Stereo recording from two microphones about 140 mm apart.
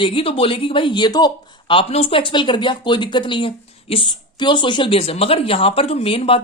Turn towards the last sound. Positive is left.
turn(degrees=40)  # may be behind; listen again after turning